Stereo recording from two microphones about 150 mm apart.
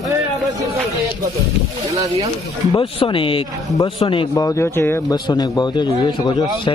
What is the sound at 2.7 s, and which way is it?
Speech, 35° left (ahead or behind).